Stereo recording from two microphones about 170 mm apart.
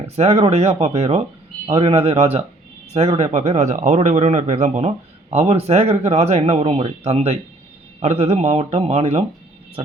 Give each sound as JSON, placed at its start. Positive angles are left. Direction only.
{"t": 0.2, "sound": "speech", "side_deg": -40}